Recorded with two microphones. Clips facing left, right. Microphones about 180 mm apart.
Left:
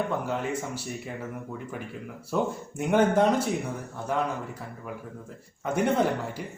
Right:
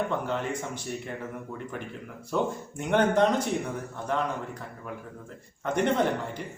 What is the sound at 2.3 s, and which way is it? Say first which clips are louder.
A man's voice: even; 5° left (ahead or behind).